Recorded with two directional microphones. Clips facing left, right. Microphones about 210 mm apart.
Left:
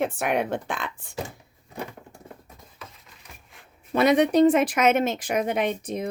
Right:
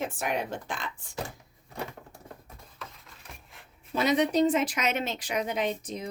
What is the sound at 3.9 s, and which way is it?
Speech, 60° left (ahead or behind).